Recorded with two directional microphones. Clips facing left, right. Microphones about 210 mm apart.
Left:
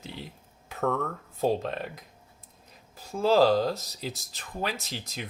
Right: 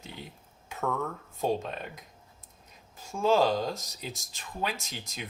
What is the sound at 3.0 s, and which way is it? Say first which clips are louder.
Speech: left 3 dB; 35° left (ahead or behind).